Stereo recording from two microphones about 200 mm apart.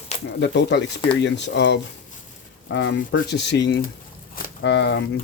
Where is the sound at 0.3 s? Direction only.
60° left (ahead or behind).